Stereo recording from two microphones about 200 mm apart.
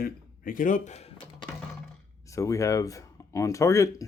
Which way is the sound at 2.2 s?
15° left (ahead or behind).